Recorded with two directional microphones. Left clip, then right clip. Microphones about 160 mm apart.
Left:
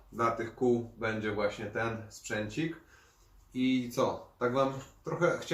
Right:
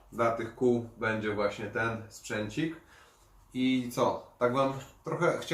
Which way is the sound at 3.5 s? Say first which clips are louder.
Right 1 dB; 20° right (ahead or behind).